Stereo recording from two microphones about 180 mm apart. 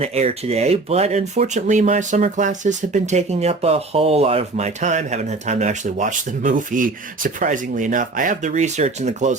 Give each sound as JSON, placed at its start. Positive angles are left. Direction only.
{"t": 0.0, "sound": "speech", "side_deg": -35}